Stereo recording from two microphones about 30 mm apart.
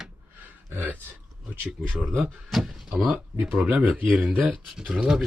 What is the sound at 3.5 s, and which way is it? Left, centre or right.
Speech, right.